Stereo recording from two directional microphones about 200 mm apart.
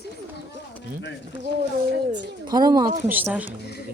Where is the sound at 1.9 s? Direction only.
60° right (ahead or behind).